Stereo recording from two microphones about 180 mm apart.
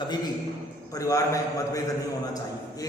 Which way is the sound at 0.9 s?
20° left (ahead or behind).